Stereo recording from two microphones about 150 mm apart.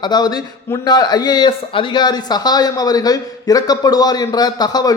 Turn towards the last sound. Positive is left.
turn(degrees=25)  # may be behind; listen again after turning